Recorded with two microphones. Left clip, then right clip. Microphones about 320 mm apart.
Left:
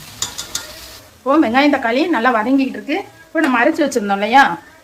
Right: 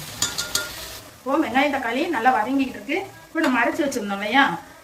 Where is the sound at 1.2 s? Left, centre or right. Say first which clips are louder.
Left 7 dB; centre.